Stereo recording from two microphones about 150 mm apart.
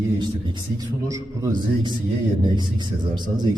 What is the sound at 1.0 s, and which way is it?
A man's voice, 20° right (ahead or behind).